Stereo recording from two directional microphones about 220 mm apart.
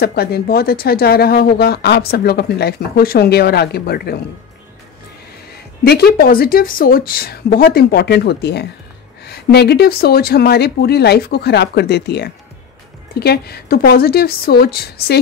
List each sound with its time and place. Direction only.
0.0 s speech: 45° left (ahead or behind)
5.9 s speech: 45° left (ahead or behind)